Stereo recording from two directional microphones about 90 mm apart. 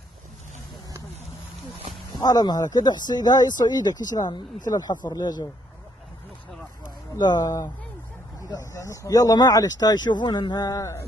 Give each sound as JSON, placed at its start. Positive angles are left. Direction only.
{"t": 2.1, "sound": "speech", "side_deg": 45}
{"t": 7.2, "sound": "speech", "side_deg": 50}
{"t": 7.4, "sound": "speech", "side_deg": 35}